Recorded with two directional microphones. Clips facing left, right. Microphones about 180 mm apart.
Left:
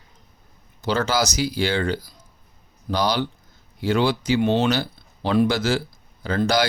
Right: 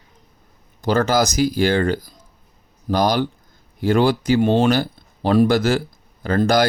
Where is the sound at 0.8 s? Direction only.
50° right (ahead or behind).